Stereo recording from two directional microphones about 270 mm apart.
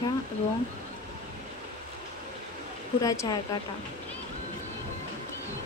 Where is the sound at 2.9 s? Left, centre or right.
Centre.